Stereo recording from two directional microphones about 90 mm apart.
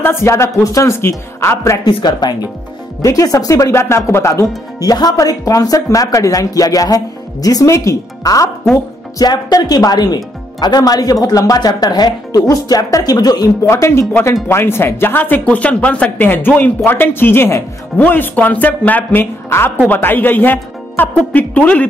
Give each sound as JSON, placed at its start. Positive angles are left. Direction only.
{"t": 0.0, "sound": "speech", "side_deg": 30}
{"t": 1.9, "sound": "speech", "side_deg": 60}
{"t": 3.0, "sound": "speech", "side_deg": 40}
{"t": 13.7, "sound": "speech", "side_deg": 30}